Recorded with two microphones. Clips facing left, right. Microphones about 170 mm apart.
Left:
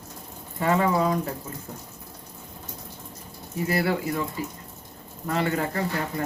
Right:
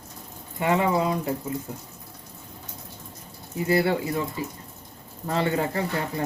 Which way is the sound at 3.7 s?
25° right (ahead or behind).